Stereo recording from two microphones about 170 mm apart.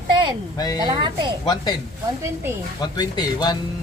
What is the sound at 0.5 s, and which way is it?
Speech, 25° left (ahead or behind).